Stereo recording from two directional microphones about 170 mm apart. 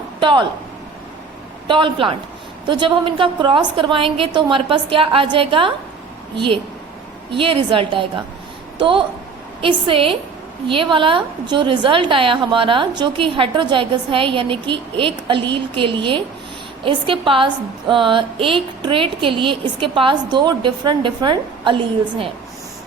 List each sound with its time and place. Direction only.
0.2 s speech: 30° right (ahead or behind)
1.6 s a woman's voice: 30° right (ahead or behind)